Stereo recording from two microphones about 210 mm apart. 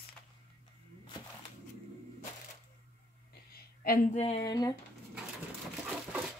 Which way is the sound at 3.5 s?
45° left (ahead or behind).